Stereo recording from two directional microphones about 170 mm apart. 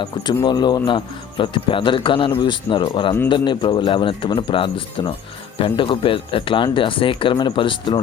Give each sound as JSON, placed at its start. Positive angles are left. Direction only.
{"t": 0.0, "sound": "speech", "side_deg": 25}